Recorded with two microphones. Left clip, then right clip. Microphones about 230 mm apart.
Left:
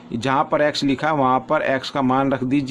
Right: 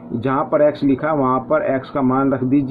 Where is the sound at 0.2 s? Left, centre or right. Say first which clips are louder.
Right 2 dB; left.